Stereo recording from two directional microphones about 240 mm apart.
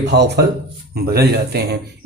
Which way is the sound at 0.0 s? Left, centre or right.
Right.